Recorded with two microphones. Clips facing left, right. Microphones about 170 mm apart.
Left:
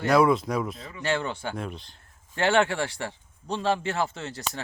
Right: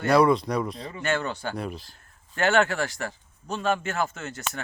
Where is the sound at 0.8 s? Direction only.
30° right (ahead or behind).